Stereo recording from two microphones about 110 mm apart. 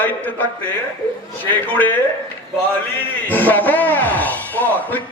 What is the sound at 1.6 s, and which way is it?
Speech, 15° left (ahead or behind).